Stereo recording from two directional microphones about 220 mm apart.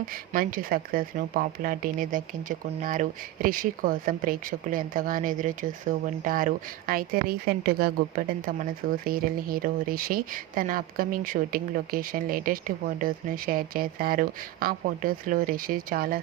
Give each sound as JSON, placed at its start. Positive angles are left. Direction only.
{"t": 0.1, "sound": "speech", "side_deg": -40}